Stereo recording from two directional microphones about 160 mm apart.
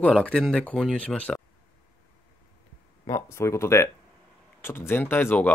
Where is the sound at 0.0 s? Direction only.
5° left (ahead or behind).